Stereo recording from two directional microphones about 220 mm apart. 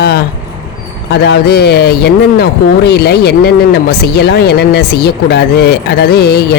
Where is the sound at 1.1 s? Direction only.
50° left (ahead or behind).